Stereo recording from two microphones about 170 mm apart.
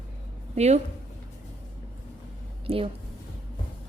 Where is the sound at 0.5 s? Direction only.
40° right (ahead or behind).